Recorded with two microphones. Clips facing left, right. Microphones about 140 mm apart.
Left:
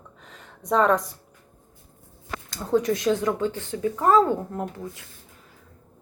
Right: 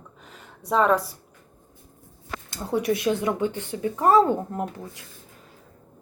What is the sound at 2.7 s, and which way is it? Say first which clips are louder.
Speech: left 2 dB; 10° right (ahead or behind).